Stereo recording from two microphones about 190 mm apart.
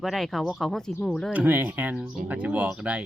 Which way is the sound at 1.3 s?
10° right (ahead or behind).